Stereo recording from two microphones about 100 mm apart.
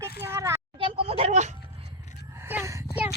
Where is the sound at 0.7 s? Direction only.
65° right (ahead or behind); by 1.3 s 80° right.